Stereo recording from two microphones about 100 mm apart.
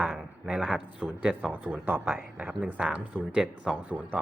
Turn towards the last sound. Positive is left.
turn(degrees=-15)  # may be behind; listen again after turning